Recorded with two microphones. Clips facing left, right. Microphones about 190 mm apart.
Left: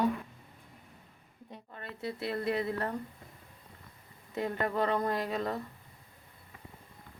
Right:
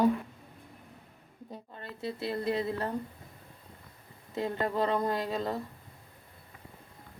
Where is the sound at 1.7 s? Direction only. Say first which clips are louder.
Right 1 dB; 30° right (ahead or behind).